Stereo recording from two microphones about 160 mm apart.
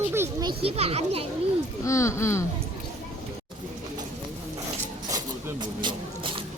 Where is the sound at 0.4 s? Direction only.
35° right (ahead or behind).